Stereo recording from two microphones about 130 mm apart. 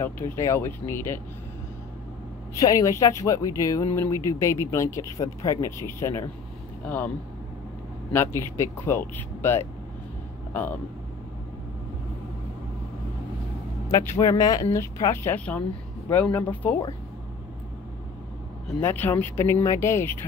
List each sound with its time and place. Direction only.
0.0 s speech: 20° left (ahead or behind)
2.5 s speech: 25° left (ahead or behind)
8.4 s speech: 20° left (ahead or behind)
13.8 s speech: 25° left (ahead or behind)
15.3 s speech: 15° left (ahead or behind)
18.8 s speech: 15° left (ahead or behind)